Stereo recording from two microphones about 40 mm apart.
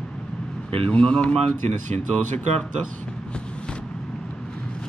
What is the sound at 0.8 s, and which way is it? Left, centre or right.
Speech, left.